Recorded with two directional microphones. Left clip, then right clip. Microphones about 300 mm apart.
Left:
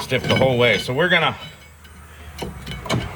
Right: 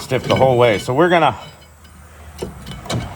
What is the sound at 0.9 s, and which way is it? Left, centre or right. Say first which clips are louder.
Speech: right 4 dB; centre.